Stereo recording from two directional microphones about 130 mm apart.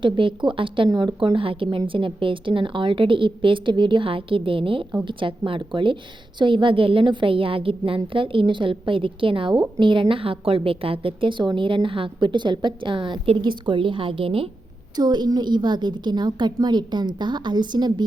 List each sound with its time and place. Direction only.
0.0 s a woman's voice: 40° right (ahead or behind)
14.9 s a woman's voice: 35° right (ahead or behind)